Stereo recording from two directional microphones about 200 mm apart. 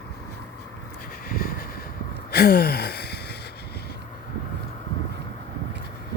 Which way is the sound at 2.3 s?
50° left (ahead or behind).